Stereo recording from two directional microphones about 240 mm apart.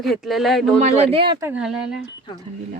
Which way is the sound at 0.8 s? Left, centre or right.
Right.